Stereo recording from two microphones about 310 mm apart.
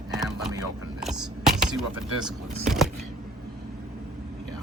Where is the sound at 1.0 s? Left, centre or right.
Centre.